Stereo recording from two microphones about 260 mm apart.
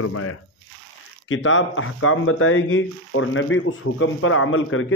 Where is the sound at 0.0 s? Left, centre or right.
Left.